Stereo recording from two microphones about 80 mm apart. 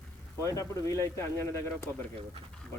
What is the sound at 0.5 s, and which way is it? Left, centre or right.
Speech, left.